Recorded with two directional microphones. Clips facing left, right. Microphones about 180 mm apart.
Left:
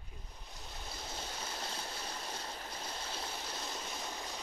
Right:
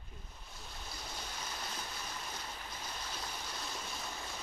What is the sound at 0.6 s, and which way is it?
Stream, 20° left (ahead or behind).